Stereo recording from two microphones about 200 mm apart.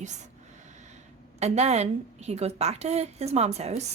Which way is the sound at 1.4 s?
35° right (ahead or behind).